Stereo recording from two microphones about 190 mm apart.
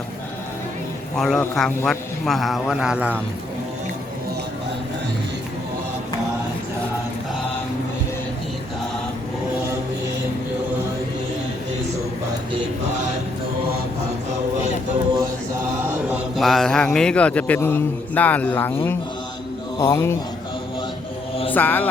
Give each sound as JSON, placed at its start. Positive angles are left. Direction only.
{"t": 1.1, "sound": "a man's voice", "side_deg": 0}
{"t": 15.2, "sound": "mantra", "side_deg": -10}
{"t": 19.8, "sound": "a man's voice", "side_deg": 15}
{"t": 21.5, "sound": "a man's voice", "side_deg": 10}